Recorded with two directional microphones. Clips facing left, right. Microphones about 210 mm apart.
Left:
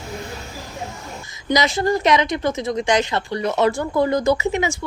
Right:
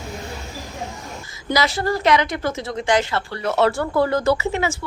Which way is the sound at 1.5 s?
20° left (ahead or behind).